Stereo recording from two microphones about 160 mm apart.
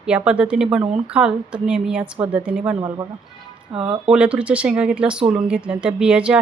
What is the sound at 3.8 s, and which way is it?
Speech, 35° right (ahead or behind).